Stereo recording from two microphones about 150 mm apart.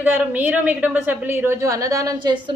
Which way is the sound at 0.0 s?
10° right (ahead or behind).